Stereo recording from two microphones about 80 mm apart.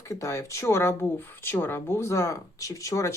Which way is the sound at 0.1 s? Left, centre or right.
Left.